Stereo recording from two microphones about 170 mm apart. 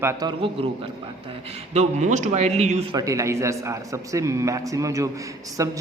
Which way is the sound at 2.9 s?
20° right (ahead or behind).